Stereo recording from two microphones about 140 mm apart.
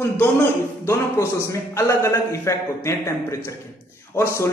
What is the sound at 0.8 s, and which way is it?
A man's voice, 20° left (ahead or behind).